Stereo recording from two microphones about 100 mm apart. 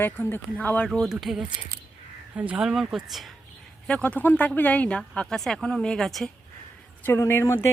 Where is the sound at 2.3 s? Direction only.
15° right (ahead or behind).